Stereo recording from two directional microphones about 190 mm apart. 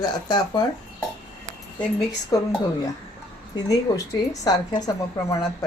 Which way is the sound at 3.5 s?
20° left (ahead or behind).